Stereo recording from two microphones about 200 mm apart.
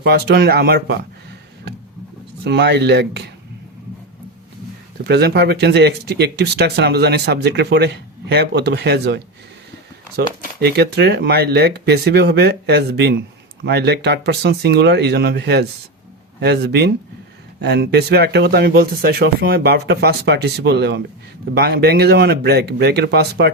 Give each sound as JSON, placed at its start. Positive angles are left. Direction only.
{"t": 0.0, "sound": "speech", "side_deg": -55}
{"t": 5.0, "sound": "speech", "side_deg": -55}